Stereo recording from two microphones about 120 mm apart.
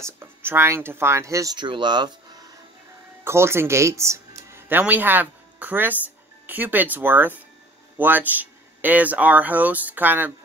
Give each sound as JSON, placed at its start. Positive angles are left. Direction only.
{"t": 0.0, "sound": "speech", "side_deg": -20}
{"t": 3.3, "sound": "speech", "side_deg": -20}